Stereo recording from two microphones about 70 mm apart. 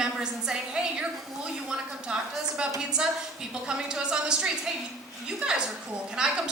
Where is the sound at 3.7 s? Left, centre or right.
Centre.